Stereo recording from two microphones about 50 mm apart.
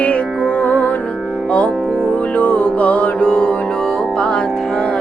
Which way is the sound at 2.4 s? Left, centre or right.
Left.